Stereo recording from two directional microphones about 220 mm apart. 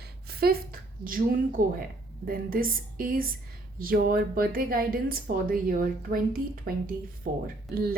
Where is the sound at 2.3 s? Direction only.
40° right (ahead or behind).